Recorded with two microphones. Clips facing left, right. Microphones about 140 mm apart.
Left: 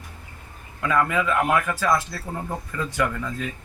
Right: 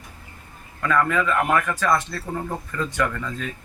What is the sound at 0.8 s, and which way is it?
A man's voice, 10° left (ahead or behind).